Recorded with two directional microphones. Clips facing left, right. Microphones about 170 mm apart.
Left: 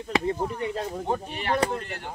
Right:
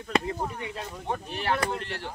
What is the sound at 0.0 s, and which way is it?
Speech, 35° left (ahead or behind).